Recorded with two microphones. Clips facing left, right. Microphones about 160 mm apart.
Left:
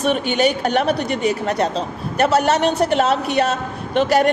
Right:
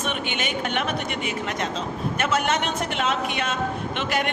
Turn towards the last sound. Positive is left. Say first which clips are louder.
# left 10 dB
turn(degrees=40)  # may be behind; listen again after turning